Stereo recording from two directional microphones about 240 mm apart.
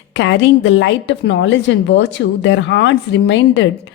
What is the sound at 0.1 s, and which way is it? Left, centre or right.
A woman's voice, left.